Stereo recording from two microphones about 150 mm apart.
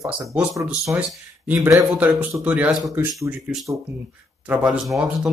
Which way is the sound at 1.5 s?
20° right (ahead or behind).